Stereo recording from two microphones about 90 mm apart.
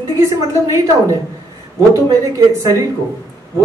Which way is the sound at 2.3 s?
30° right (ahead or behind).